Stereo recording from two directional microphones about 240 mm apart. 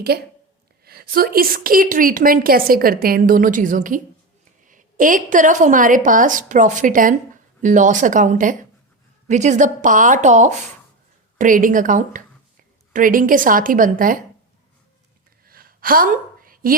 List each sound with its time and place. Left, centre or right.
0.1 s a woman's voice: right
15.4 s gasp: right